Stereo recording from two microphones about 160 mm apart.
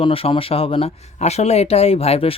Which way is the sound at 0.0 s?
35° left (ahead or behind).